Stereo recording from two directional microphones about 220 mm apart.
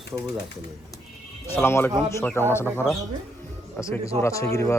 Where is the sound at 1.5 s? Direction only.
10° left (ahead or behind).